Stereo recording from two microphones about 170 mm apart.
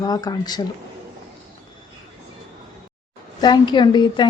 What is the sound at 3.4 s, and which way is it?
Speech, 25° left (ahead or behind).